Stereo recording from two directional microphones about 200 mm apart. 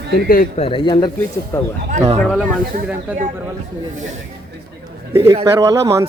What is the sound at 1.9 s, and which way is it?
Speech, 35° right (ahead or behind).